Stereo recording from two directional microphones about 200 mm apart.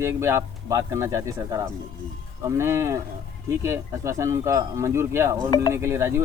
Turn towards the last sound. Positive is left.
turn(degrees=-15)  # may be behind; listen again after turning